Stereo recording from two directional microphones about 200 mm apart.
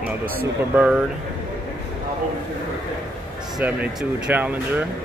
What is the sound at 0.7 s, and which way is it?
Speech, 5° right (ahead or behind).